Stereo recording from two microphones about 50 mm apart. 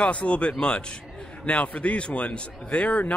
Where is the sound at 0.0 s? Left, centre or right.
Left.